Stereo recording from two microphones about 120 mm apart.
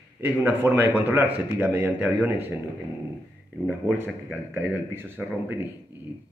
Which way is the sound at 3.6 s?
15° right (ahead or behind).